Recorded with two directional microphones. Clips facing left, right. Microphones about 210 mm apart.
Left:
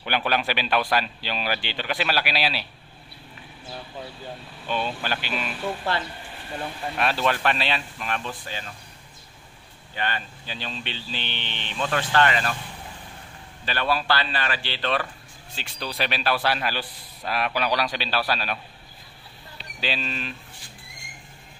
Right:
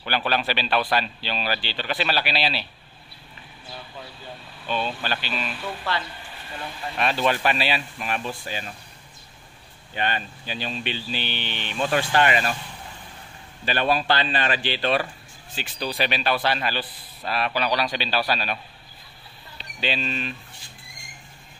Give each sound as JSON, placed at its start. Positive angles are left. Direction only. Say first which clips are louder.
{"t": 0.0, "sound": "speech", "louder": "even", "side_deg": 15}
{"t": 4.6, "sound": "speech", "louder": "even", "side_deg": 10}
{"t": 7.0, "sound": "speech", "louder": "right 1 dB", "side_deg": 0}
{"t": 9.9, "sound": "speech", "louder": "right 3 dB", "side_deg": -20}
{"t": 13.7, "sound": "speech", "louder": "right 2 dB", "side_deg": -20}
{"t": 15.5, "sound": "a man's voice", "louder": "right 4 dB", "side_deg": 0}
{"t": 19.8, "sound": "a man's voice", "louder": "right 2 dB", "side_deg": 0}